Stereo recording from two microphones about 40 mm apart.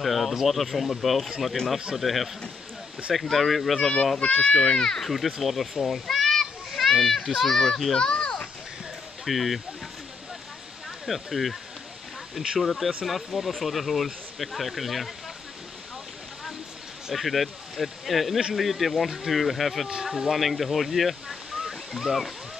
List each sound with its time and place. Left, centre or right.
0.0 s speech: centre
4.3 s a child's voice: left
4.6 s speech: centre
5.1 s a child's voice: centre
8.0 s a sound: left
9.2 s speech: centre
11.1 s speech: centre
17.1 s speech: centre
19.9 s speech: centre